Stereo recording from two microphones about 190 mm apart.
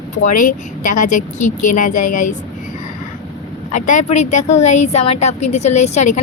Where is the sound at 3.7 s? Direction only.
40° left (ahead or behind).